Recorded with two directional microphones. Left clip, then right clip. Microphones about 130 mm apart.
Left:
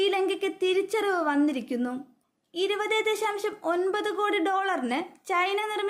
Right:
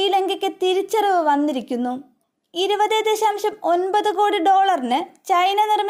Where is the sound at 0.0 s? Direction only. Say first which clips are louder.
Right 6 dB; 40° right (ahead or behind).